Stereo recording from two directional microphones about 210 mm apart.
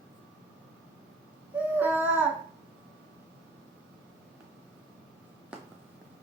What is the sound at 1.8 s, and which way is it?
Babbling, 10° right (ahead or behind).